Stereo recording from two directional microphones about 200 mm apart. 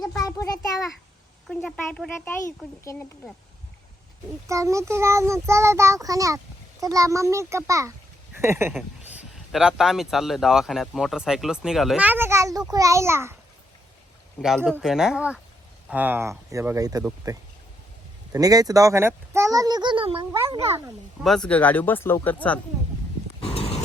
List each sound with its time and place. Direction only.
0.2 s a sound: 15° left (ahead or behind)
1.5 s speech: 5° left (ahead or behind)
4.4 s a child's voice: 15° right (ahead or behind)
14.4 s a child's voice: centre (ahead or behind); by 20.2 s 25° right (ahead or behind)
21.2 s speech: 5° left (ahead or behind)
23.4 s a sound: 30° left (ahead or behind)